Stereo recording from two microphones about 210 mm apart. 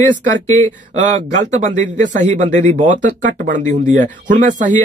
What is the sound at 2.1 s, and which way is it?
Speech, 35° right (ahead or behind).